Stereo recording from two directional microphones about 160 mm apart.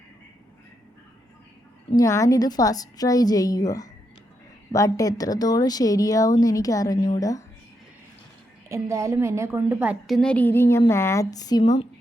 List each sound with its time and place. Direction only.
2.0 s speech: 20° left (ahead or behind)
8.7 s a woman's voice: 20° right (ahead or behind)
10.2 s a woman's voice: 10° left (ahead or behind); by 11.8 s 25° left (ahead or behind)